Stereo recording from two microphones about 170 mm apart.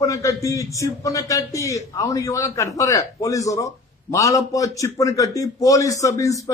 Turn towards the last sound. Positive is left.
turn(degrees=20)  # may be behind; listen again after turning